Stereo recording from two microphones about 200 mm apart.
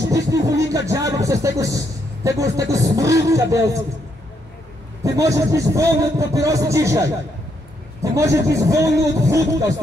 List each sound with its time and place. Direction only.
0.3 s a man's voice: 15° right (ahead or behind)
5.0 s a man's voice: 15° right (ahead or behind)